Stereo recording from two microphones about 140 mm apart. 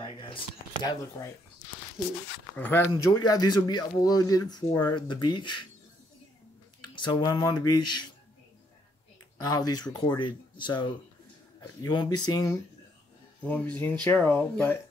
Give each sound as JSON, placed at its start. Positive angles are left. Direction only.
{"t": 0.0, "sound": "a sound", "side_deg": 35}
{"t": 2.5, "sound": "speech", "side_deg": 15}
{"t": 2.9, "sound": "speech", "side_deg": 30}
{"t": 7.0, "sound": "speech", "side_deg": 35}
{"t": 9.4, "sound": "speech", "side_deg": 30}
{"t": 13.4, "sound": "speech", "side_deg": 10}